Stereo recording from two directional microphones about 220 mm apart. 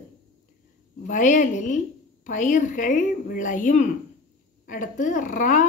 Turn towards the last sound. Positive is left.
turn(degrees=35)  # may be behind; listen again after turning